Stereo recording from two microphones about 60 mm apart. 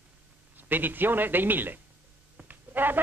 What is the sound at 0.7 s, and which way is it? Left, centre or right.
Speech, right.